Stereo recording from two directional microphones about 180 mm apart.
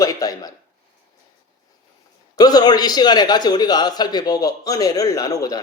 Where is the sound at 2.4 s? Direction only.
20° left (ahead or behind).